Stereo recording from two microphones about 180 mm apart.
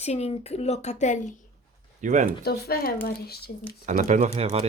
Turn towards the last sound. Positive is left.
turn(degrees=-35)  # may be behind; listen again after turning